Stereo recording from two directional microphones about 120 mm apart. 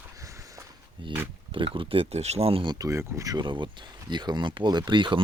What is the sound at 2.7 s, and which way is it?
Speech, 25° right (ahead or behind).